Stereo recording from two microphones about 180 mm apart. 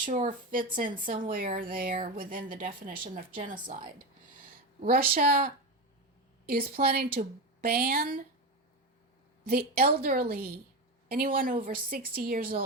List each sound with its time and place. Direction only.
0.0 s a woman's voice: 45° right (ahead or behind)
6.4 s a woman's voice: 55° right (ahead or behind)
9.5 s a woman's voice: 60° right (ahead or behind)
11.6 s a woman's voice: 50° right (ahead or behind)